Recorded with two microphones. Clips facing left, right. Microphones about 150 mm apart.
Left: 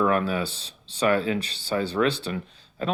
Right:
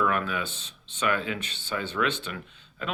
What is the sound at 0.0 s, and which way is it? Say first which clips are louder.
Speech: left 4 dB; 35° left (ahead or behind).